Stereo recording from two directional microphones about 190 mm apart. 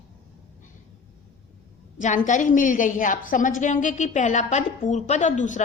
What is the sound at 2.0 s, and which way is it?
A woman's voice, 40° left (ahead or behind).